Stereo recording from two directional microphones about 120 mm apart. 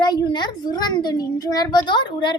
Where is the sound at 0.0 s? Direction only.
40° left (ahead or behind).